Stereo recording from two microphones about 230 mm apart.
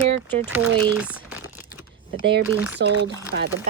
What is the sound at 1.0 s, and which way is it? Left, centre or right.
Crumpling, centre.